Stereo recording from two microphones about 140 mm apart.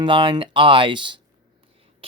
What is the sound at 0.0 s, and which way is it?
Speech, 35° right (ahead or behind).